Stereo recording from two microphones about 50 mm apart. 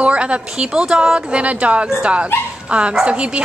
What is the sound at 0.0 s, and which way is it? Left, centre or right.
Speech, right.